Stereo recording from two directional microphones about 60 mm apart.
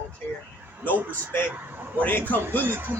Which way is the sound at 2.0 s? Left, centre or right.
Left.